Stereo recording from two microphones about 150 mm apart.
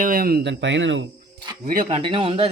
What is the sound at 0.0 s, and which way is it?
Speech, 70° right (ahead or behind).